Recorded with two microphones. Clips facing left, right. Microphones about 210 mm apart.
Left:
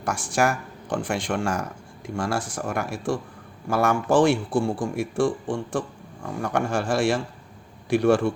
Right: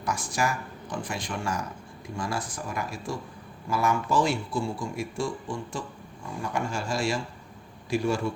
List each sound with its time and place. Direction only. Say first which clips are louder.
0.0 s speech: left 5 dB; 70° left (ahead or behind)